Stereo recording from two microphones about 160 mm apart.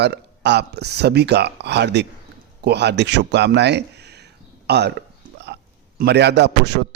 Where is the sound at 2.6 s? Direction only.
90° right.